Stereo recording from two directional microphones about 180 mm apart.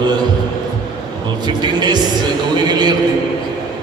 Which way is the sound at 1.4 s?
25° right (ahead or behind).